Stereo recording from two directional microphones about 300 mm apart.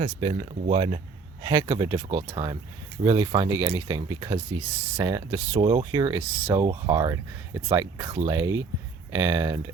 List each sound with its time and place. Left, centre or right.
0.0 s speech: centre